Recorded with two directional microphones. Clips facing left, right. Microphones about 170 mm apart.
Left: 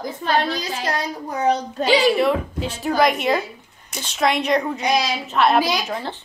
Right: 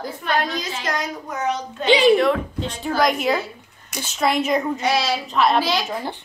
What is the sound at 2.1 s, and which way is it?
Child singing, 5° left (ahead or behind).